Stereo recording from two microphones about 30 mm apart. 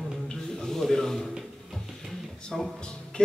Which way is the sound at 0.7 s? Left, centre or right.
Centre.